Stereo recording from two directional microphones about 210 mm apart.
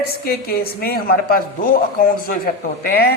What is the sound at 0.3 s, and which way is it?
Speech, 45° left (ahead or behind).